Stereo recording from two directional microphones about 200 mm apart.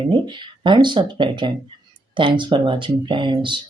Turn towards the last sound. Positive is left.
turn(degrees=-25)  # may be behind; listen again after turning